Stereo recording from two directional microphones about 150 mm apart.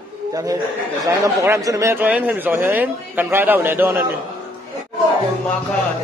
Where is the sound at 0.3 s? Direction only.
25° right (ahead or behind).